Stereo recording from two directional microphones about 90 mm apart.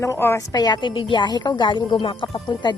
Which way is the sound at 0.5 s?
50° left (ahead or behind).